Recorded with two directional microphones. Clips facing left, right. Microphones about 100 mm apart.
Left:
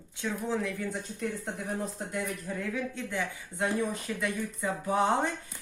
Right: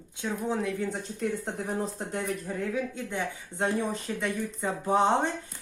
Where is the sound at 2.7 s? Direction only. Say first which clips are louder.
Right 2 dB; 25° right (ahead or behind).